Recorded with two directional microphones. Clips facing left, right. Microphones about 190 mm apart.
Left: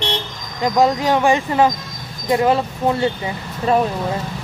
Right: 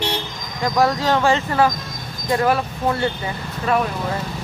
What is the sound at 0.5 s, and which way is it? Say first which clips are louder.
Speech: left 3 dB; 20° left (ahead or behind).